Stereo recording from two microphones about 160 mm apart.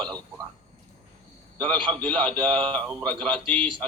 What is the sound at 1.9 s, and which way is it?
A man's voice, 10° left (ahead or behind).